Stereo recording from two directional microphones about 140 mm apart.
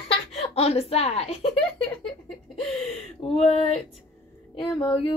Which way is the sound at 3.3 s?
45° left (ahead or behind).